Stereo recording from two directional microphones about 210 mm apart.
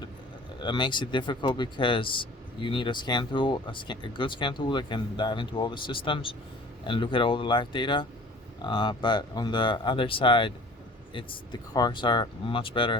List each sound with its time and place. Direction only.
0.6 s speech: 20° left (ahead or behind)